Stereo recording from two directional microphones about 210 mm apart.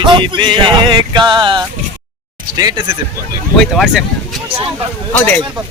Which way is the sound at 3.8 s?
Centre (ahead or behind).